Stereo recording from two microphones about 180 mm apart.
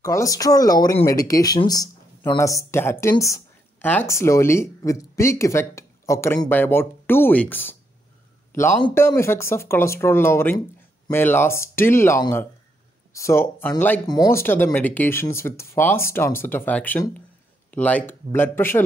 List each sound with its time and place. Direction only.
0.0 s speech: 20° left (ahead or behind)